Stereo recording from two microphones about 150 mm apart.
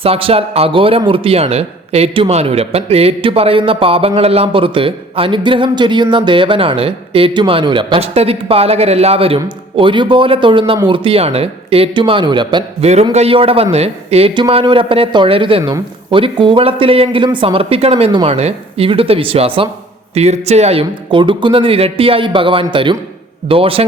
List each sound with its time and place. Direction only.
0.0 s speech: 40° right (ahead or behind)
12.8 s a man's voice: 45° right (ahead or behind)